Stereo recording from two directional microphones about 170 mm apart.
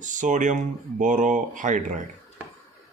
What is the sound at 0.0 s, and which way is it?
Speech, 50° right (ahead or behind).